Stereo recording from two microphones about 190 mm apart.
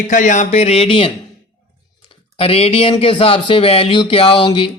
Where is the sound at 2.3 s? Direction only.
30° left (ahead or behind).